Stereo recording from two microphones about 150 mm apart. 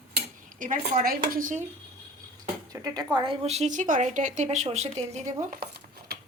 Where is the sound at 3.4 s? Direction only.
50° right (ahead or behind).